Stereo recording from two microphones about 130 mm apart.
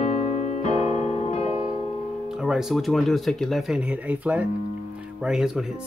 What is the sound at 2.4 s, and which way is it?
Speech, 5° right (ahead or behind).